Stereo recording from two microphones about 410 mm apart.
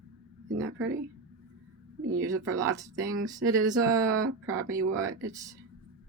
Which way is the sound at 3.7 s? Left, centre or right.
Right.